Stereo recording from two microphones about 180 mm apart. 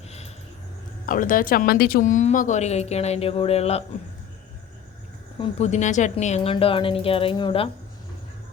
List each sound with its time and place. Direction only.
1.0 s speech: 50° left (ahead or behind)
5.4 s speech: 35° left (ahead or behind)